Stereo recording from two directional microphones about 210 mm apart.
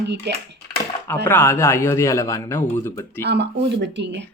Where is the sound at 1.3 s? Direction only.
10° left (ahead or behind).